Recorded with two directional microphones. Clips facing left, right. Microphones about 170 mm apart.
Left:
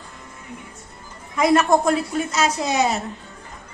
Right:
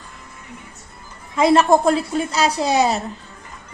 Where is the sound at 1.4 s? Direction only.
30° right (ahead or behind).